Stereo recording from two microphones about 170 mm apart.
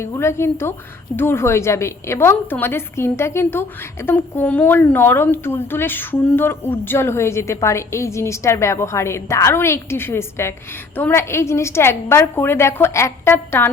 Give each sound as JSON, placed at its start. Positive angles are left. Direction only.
{"t": 0.0, "sound": "a woman's voice", "side_deg": 15}